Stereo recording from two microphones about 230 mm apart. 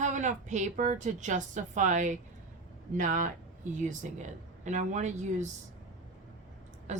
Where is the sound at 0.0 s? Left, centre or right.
Right.